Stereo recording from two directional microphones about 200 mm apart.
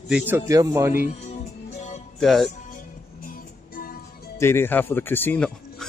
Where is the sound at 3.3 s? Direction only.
45° left (ahead or behind).